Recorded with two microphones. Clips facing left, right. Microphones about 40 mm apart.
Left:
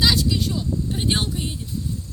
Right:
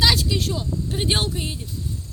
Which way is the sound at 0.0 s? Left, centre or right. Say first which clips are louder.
Even; right.